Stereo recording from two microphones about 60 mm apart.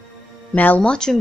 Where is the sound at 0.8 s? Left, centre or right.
Centre.